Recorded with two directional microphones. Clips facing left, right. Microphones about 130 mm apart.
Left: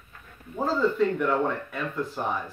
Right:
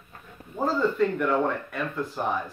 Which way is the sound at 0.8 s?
Centre (ahead or behind).